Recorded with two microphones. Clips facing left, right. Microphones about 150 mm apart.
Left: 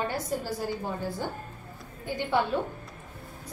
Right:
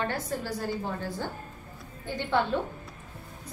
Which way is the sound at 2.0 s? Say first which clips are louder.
Even; 10° left (ahead or behind).